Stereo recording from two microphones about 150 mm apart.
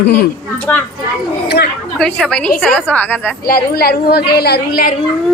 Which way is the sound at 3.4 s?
90° left.